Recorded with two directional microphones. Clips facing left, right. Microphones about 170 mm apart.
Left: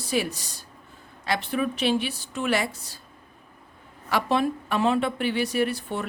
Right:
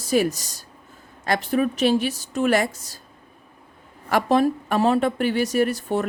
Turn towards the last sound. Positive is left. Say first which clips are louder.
# right 5 dB
turn(degrees=-45)  # may be behind; listen again after turning